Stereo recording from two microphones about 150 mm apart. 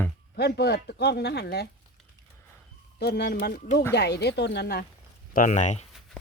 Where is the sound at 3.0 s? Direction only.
90° left.